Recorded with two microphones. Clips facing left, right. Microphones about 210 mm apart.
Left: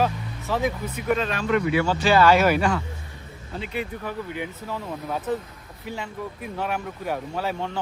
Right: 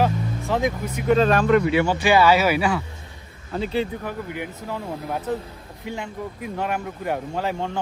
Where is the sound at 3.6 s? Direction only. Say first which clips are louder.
Right 6 dB; 30° right (ahead or behind).